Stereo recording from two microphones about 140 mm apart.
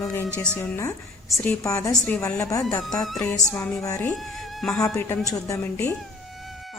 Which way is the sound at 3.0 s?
Centre (ahead or behind).